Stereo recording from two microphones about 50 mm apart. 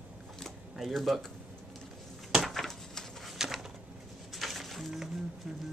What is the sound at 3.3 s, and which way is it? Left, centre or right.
Pigeon, centre.